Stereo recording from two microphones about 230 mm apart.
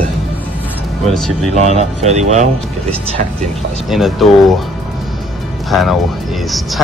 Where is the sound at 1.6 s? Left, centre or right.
Right.